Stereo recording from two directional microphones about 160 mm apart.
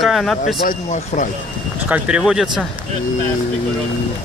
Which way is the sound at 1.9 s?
5° right (ahead or behind).